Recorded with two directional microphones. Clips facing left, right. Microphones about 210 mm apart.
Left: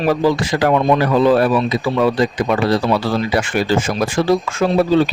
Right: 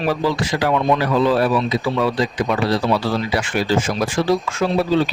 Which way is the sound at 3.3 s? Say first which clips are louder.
Left 2 dB; 50° left (ahead or behind).